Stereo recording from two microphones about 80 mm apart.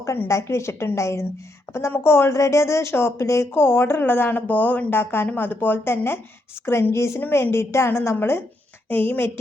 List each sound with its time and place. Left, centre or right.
0.3 s a woman's voice: left
7.2 s a woman's voice: left